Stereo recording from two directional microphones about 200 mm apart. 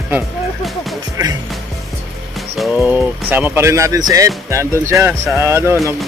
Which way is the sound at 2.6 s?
5° right (ahead or behind).